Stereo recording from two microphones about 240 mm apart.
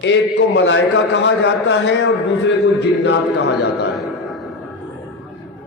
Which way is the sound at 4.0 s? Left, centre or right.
Centre.